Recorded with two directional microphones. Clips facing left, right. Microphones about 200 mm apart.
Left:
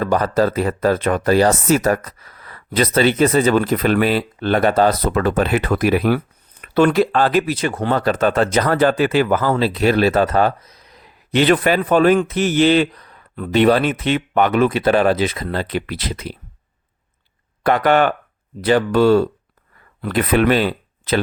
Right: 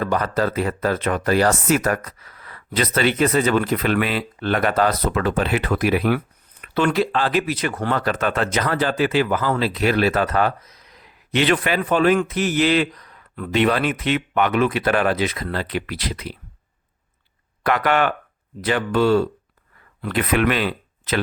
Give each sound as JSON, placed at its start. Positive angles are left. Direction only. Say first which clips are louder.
{"t": 0.0, "sound": "speech", "louder": "left 4 dB", "side_deg": 35}
{"t": 7.5, "sound": "speech", "louder": "left 3 dB", "side_deg": 25}
{"t": 9.6, "sound": "speech", "louder": "left 4 dB", "side_deg": 30}
{"t": 12.3, "sound": "speech", "louder": "left 4 dB", "side_deg": 25}
{"t": 17.7, "sound": "speech", "louder": "left 4 dB", "side_deg": 30}